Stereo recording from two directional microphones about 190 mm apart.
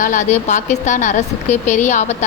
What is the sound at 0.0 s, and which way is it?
A woman's voice, 40° left (ahead or behind).